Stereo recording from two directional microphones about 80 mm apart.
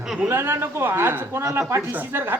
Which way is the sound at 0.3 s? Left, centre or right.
Right.